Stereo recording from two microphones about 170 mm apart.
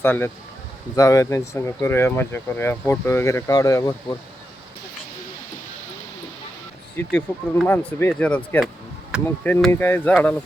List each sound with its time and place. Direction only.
0.0 s speech: 15° left (ahead or behind)
6.9 s speech: 10° left (ahead or behind)